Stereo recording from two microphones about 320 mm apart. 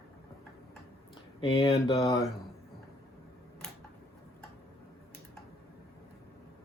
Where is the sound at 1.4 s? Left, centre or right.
Centre.